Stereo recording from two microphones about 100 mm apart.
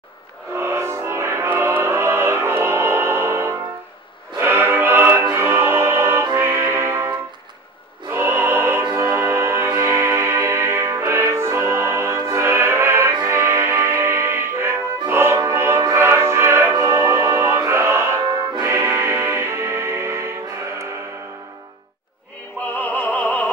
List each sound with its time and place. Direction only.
0.6 s music: 25° right (ahead or behind)
22.8 s opera: 15° left (ahead or behind)